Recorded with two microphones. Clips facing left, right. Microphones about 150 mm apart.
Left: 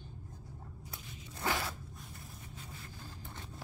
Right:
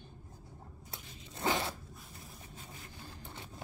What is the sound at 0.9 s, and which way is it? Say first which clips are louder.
Zipper: right 2 dB; 25° right (ahead or behind).